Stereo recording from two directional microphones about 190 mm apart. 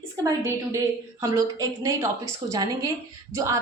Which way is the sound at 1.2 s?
20° right (ahead or behind).